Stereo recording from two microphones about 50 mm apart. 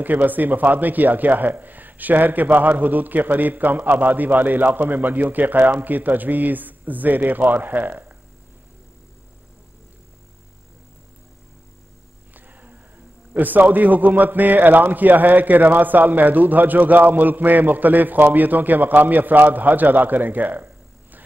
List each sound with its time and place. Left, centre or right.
0.0 s a man's voice: right
12.4 s music: right
13.3 s a man's voice: right